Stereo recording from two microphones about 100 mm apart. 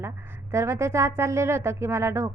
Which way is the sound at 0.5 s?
25° right (ahead or behind).